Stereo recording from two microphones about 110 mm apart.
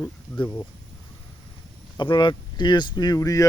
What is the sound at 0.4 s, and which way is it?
Speech, 30° left (ahead or behind).